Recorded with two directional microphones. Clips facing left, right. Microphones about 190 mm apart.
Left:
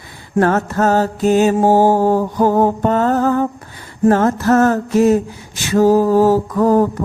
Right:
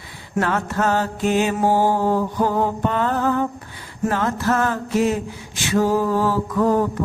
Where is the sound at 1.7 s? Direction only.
45° left (ahead or behind).